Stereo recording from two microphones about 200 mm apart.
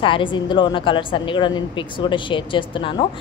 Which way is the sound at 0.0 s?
25° left (ahead or behind).